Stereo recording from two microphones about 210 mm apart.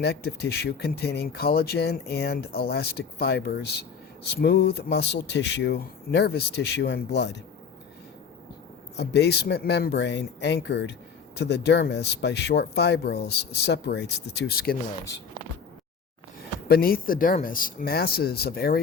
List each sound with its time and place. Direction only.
0.0 s speech: 50° left (ahead or behind)
9.0 s speech: 50° left (ahead or behind)
16.6 s speech: 45° left (ahead or behind)